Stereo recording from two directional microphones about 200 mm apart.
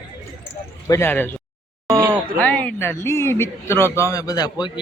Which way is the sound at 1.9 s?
10° right (ahead or behind).